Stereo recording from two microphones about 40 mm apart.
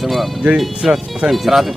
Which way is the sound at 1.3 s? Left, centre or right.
Centre.